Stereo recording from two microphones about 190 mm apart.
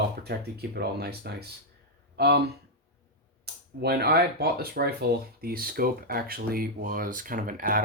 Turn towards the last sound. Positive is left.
turn(degrees=-45)  # may be behind; listen again after turning